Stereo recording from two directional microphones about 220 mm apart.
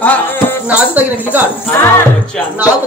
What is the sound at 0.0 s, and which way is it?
Music, 10° left (ahead or behind).